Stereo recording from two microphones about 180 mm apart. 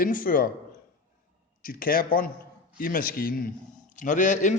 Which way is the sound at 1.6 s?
55° left (ahead or behind).